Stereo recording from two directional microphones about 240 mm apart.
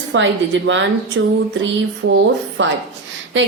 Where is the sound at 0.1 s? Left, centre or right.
Right.